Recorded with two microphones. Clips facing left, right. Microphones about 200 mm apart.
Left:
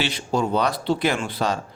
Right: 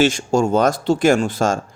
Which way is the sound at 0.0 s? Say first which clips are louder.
Right 7 dB; 45° right (ahead or behind).